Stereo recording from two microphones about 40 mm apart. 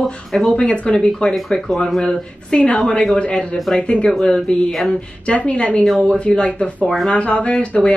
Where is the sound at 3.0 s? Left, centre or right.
Centre.